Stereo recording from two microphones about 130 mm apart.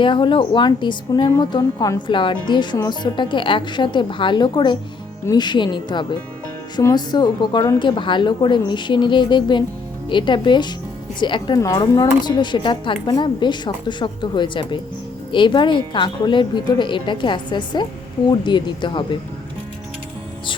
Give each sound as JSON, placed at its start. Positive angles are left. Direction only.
{"t": 0.0, "sound": "a woman's voice", "side_deg": 40}